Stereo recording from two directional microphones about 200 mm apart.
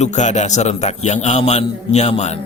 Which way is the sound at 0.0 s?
35° left (ahead or behind).